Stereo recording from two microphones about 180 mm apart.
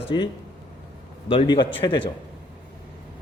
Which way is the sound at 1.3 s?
30° left (ahead or behind).